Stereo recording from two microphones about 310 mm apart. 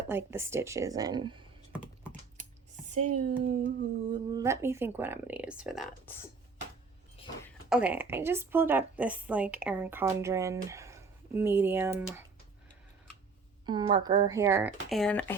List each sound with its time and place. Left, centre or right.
0.1 s a woman's voice: centre
2.9 s speech: right
4.1 s a woman's voice: centre
7.2 s a sound: centre
7.7 s a woman's voice: centre
13.7 s a woman's voice: centre